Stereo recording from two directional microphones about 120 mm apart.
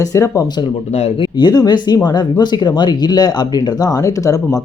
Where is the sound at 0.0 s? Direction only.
25° left (ahead or behind).